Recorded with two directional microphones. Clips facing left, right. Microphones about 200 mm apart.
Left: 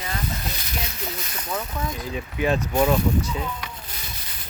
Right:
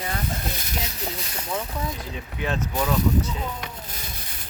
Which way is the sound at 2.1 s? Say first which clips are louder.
Left 7 dB; 10° left (ahead or behind).